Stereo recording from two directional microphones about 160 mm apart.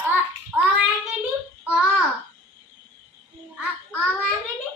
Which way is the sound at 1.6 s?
5° right (ahead or behind).